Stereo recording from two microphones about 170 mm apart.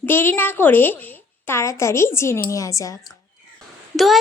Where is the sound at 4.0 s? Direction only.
Centre (ahead or behind).